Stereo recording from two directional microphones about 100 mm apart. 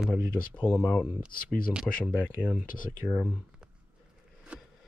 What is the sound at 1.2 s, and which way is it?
Speech, 10° right (ahead or behind).